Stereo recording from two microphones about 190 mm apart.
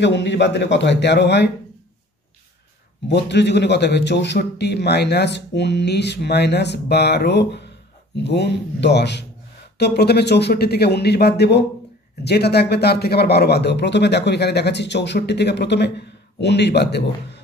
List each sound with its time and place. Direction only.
0.0 s speech: 65° left (ahead or behind)
3.1 s speech: 65° left (ahead or behind)